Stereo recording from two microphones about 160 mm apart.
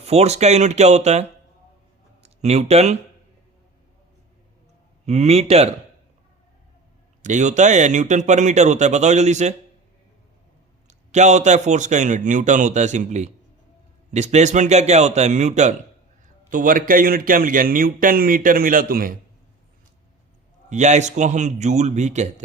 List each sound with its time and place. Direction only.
0.0 s a man's voice: 40° right (ahead or behind)
5.0 s speech: 45° right (ahead or behind)
7.2 s a man's voice: 50° right (ahead or behind)
10.8 s a man's voice: 45° right (ahead or behind); by 19.1 s 65° right (ahead or behind)
20.7 s a man's voice: 45° right (ahead or behind)